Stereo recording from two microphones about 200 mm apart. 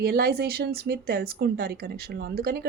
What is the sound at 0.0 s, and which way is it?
Speech, 50° right (ahead or behind).